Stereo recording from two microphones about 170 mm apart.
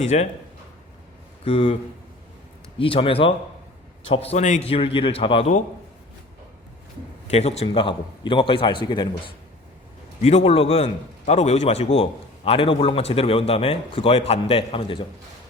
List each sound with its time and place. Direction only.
0.0 s speech: 45° left (ahead or behind)
1.5 s a man's voice: 35° left (ahead or behind)
2.7 s a man's voice: 30° left (ahead or behind)
7.3 s a man's voice: 40° left (ahead or behind)